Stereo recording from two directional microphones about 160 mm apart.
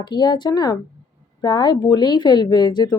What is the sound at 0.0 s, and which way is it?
Speech, 25° left (ahead or behind).